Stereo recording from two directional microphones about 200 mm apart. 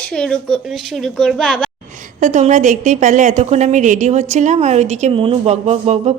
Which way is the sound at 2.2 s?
40° right (ahead or behind).